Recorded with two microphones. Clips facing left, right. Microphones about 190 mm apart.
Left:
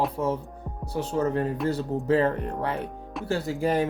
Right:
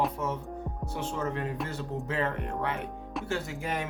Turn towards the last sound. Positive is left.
turn(degrees=35)  # may be behind; listen again after turning